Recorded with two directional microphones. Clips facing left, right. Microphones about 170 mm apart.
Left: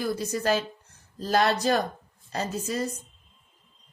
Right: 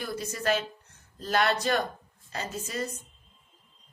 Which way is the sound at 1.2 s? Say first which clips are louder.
Left 3 dB; 35° left (ahead or behind).